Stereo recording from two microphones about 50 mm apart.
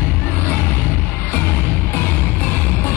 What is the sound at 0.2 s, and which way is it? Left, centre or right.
Music, left.